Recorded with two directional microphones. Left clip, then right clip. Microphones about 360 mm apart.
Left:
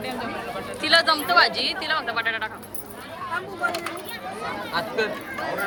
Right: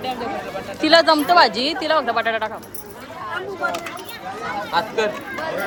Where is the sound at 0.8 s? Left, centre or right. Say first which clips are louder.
Right 5 dB; centre.